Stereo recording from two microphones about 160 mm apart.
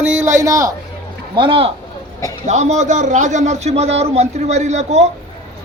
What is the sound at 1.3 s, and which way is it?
Speech, 30° right (ahead or behind).